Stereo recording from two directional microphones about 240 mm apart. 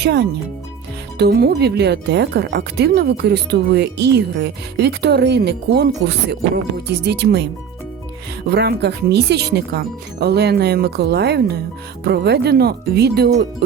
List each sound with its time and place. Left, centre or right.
0.0 s speech: right
8.4 s speech: right